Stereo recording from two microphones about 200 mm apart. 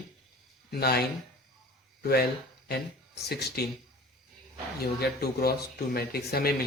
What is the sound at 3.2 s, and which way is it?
Speech, 55° left (ahead or behind).